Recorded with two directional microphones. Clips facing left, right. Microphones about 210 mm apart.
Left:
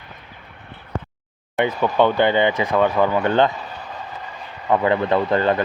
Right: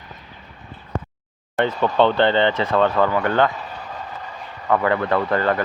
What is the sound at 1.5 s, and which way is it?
Speech, 15° left (ahead or behind).